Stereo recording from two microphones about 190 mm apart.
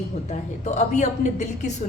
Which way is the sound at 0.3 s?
40° left (ahead or behind).